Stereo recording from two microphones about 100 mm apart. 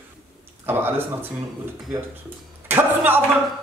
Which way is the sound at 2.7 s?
20° right (ahead or behind).